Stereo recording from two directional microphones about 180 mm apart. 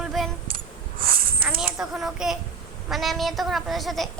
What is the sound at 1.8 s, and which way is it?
A woman's voice, centre (ahead or behind).